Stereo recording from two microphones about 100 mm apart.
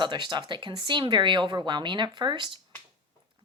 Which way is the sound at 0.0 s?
50° right (ahead or behind).